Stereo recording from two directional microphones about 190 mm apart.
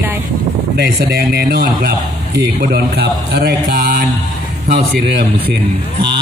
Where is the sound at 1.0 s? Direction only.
55° right (ahead or behind).